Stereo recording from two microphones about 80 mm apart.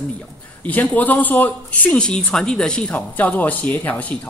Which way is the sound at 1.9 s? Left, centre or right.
Centre.